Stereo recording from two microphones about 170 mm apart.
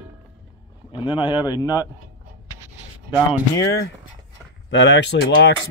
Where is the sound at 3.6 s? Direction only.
75° left (ahead or behind).